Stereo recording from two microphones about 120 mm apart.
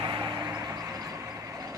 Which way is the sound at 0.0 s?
40° right (ahead or behind).